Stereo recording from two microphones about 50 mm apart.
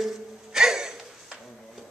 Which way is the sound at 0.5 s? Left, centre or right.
Centre.